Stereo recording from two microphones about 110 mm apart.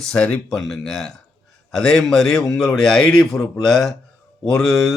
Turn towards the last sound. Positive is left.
turn(degrees=5)  # may be behind; listen again after turning